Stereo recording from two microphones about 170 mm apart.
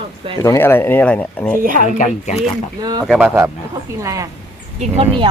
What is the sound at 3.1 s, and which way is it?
Speech, 5° right (ahead or behind).